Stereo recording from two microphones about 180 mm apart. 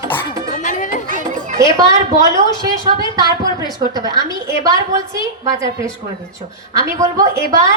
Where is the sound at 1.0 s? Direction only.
45° right (ahead or behind).